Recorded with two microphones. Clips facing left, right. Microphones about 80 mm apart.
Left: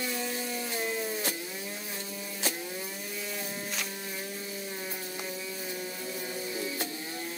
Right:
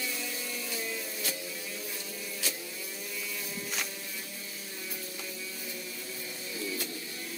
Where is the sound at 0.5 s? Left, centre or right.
Left.